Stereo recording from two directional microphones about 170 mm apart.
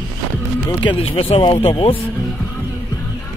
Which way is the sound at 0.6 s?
30° left (ahead or behind).